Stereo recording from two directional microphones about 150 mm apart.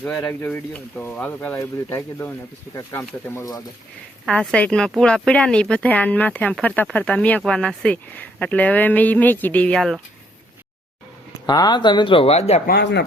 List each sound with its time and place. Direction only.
0.0 s speech: 5° left (ahead or behind)
4.3 s speech: 5° left (ahead or behind)
11.4 s speech: 25° left (ahead or behind); by 12.6 s 45° left (ahead or behind)
12.6 s speech: 90° left